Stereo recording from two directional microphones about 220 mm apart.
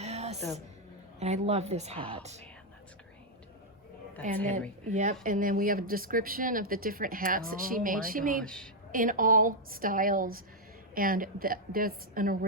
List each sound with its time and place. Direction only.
0.0 s music: 30° right (ahead or behind)
1.2 s a woman's voice: 30° right (ahead or behind)
4.2 s speech: 35° right (ahead or behind)
8.4 s a woman's voice: 5° left (ahead or behind)
8.9 s speech: 40° right (ahead or behind)